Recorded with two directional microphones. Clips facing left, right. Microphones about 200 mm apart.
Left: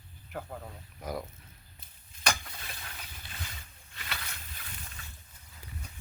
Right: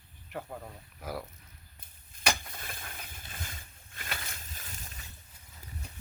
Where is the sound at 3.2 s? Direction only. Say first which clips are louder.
Right 1 dB; 50° right (ahead or behind).